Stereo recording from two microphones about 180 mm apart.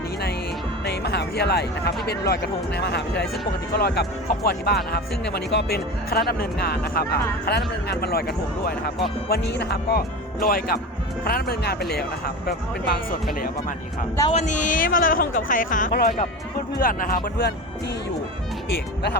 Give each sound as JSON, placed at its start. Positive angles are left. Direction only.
{"t": 0.9, "sound": "speech", "side_deg": 65}
{"t": 9.3, "sound": "speech", "side_deg": 70}
{"t": 10.4, "sound": "speech", "side_deg": 55}
{"t": 14.3, "sound": "speech", "side_deg": 45}
{"t": 15.9, "sound": "speech", "side_deg": 60}